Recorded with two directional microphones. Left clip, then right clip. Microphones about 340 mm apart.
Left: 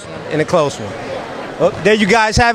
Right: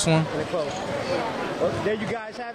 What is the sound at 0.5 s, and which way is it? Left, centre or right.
Speech, left.